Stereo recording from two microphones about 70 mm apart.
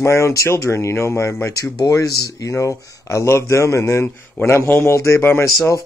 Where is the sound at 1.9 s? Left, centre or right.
Left.